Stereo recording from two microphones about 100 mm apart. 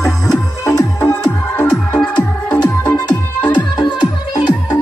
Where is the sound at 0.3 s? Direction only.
30° left (ahead or behind).